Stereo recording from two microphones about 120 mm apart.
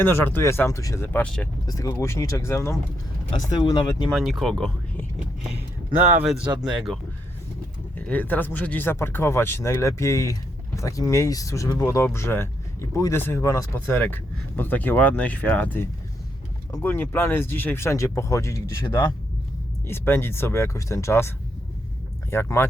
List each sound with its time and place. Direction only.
0.0 s speech: 20° left (ahead or behind)
1.6 s speech: 30° left (ahead or behind)
3.5 s speech: 35° left (ahead or behind)
4.1 s speech: 5° right (ahead or behind)
5.5 s a sound: 15° right (ahead or behind)
6.6 s speech: 5° right (ahead or behind)
7.9 s speech: 15° left (ahead or behind)
13.7 s speech: 15° left (ahead or behind)